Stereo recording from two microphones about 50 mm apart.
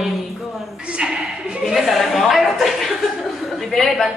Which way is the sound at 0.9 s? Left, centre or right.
Centre.